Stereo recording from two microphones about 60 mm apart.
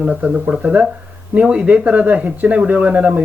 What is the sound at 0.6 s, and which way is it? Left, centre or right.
Speech, right.